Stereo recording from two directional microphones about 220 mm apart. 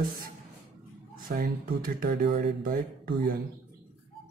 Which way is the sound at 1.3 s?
40° right (ahead or behind).